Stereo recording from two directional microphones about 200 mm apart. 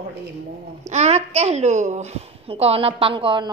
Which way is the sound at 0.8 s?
35° right (ahead or behind).